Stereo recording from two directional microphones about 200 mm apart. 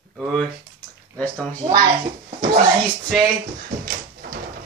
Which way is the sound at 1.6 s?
25° right (ahead or behind).